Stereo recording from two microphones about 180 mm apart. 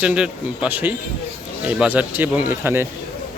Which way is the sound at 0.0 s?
5° right (ahead or behind).